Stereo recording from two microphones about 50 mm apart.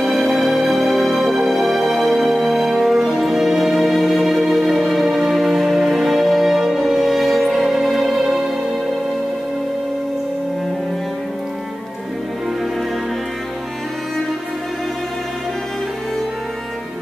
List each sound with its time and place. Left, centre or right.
0.0 s music: centre